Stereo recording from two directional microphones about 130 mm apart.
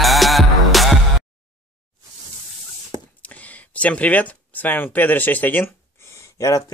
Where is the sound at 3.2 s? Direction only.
10° left (ahead or behind).